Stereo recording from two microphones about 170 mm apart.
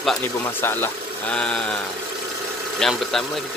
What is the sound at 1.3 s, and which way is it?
Speech, 5° left (ahead or behind).